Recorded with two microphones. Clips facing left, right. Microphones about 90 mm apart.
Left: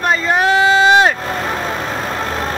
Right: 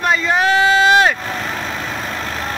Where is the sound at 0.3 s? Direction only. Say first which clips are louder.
Left 2 dB; 30° left (ahead or behind).